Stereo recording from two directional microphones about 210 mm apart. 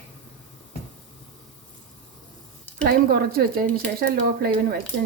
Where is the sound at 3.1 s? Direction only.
45° right (ahead or behind).